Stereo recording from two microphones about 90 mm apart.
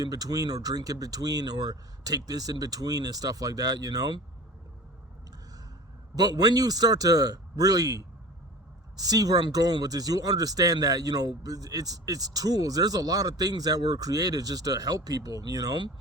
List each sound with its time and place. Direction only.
0.0 s speech: 45° right (ahead or behind)
6.1 s speech: 45° right (ahead or behind)